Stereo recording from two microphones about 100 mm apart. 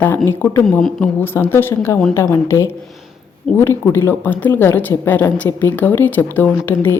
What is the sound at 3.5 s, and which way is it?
Speech, 5° left (ahead or behind).